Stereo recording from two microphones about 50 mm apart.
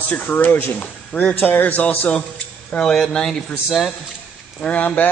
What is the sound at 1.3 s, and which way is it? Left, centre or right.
Speech, left.